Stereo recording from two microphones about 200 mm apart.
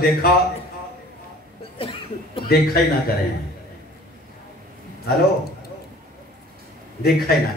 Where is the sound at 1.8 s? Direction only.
25° left (ahead or behind).